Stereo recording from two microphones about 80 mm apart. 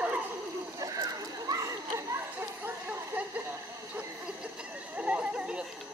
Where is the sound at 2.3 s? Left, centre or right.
Right.